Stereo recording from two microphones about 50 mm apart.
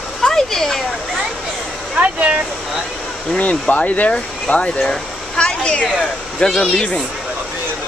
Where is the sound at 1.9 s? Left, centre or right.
Right.